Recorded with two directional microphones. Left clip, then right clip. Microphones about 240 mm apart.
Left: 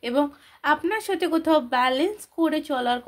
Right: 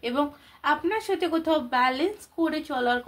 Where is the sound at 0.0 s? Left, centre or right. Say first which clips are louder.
Left 3 dB; left.